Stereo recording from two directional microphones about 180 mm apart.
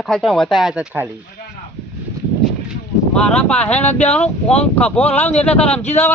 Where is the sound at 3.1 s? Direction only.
5° left (ahead or behind).